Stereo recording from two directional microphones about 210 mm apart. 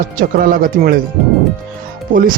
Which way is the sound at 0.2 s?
45° right (ahead or behind).